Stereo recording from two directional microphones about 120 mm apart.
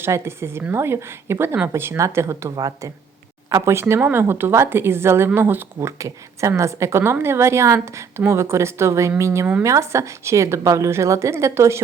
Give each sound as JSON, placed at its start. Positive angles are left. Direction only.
{"t": 0.0, "sound": "a woman's voice", "side_deg": -20}